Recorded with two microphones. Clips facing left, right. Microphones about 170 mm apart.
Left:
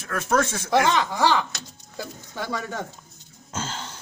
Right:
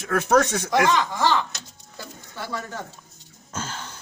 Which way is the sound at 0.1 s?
85° right.